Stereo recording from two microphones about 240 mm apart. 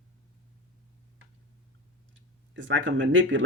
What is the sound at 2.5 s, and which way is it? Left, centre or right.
Speech, right.